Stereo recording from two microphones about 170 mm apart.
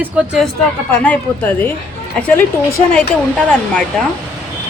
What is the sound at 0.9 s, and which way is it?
Speech, 10° left (ahead or behind).